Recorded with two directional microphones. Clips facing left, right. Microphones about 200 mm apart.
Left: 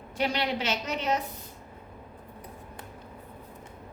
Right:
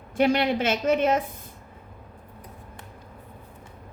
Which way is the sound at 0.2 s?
50° right (ahead or behind).